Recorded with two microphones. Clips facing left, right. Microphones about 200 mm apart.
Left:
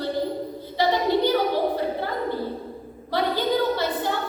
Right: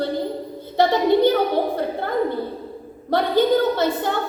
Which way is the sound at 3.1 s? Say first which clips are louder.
Right 6 dB; 50° right (ahead or behind).